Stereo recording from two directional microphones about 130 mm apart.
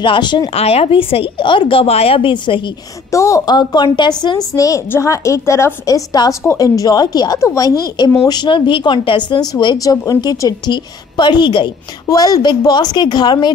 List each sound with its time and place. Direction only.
0.0 s speech: 40° left (ahead or behind)
0.6 s a woman's voice: 50° left (ahead or behind)
3.1 s a woman's voice: 25° left (ahead or behind)